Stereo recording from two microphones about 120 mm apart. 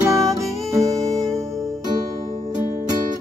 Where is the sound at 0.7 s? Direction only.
30° right (ahead or behind).